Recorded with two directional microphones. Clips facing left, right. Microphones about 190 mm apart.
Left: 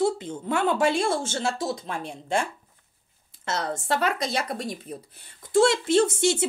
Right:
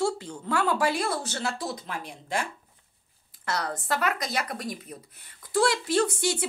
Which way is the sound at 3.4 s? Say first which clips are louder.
Left 2 dB; 25° left (ahead or behind).